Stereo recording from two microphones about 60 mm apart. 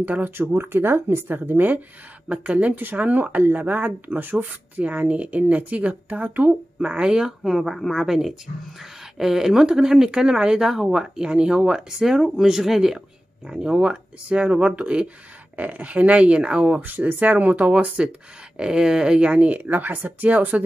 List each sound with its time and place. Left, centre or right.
0.0 s speech: right
0.5 s speech: right